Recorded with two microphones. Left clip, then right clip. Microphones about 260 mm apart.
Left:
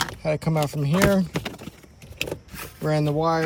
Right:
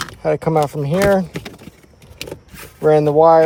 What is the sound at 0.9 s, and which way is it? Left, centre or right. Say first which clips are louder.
Speech: right 4 dB; centre.